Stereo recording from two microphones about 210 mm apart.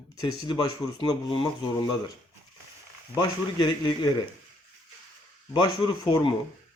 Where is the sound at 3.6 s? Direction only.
20° left (ahead or behind).